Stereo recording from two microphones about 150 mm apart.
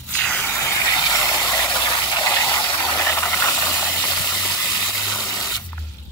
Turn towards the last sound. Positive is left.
turn(degrees=20)  # may be behind; listen again after turning